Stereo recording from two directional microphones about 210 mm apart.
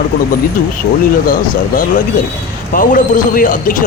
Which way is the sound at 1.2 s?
40° left (ahead or behind).